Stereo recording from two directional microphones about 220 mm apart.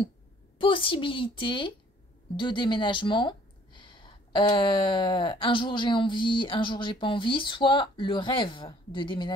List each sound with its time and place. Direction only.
0.6 s speech: 25° left (ahead or behind)